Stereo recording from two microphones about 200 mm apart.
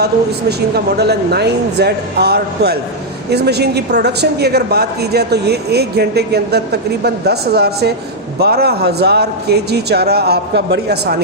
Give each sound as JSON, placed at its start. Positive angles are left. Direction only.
{"t": 0.0, "sound": "a man's voice", "side_deg": -55}